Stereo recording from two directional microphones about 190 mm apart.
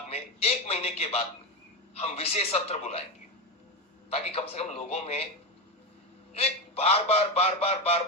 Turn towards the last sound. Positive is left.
turn(degrees=35)  # may be behind; listen again after turning